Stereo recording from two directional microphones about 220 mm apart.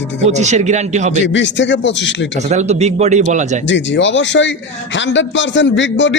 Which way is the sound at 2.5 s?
30° right (ahead or behind).